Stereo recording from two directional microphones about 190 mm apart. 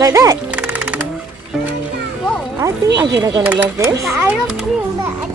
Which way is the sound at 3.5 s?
10° right (ahead or behind).